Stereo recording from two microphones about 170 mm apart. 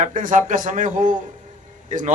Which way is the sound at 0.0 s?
45° right (ahead or behind).